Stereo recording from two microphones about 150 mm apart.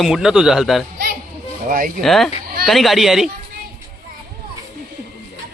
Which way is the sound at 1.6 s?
60° right (ahead or behind).